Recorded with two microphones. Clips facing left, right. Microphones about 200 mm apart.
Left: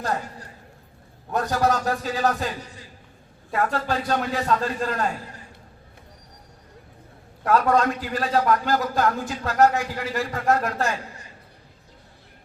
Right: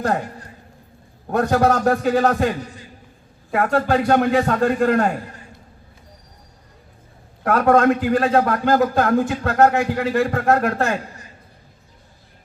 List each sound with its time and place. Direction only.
1.3 s a man's voice: 60° right (ahead or behind)
3.5 s a man's voice: 55° right (ahead or behind)
7.4 s a man's voice: 55° right (ahead or behind)